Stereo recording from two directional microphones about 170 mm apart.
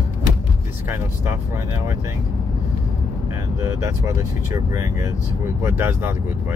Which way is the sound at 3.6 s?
20° right (ahead or behind).